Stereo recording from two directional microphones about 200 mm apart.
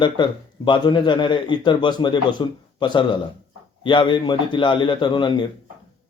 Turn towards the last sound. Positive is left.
turn(degrees=25)  # may be behind; listen again after turning